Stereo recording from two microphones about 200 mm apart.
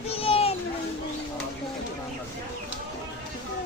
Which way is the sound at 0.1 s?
30° left (ahead or behind).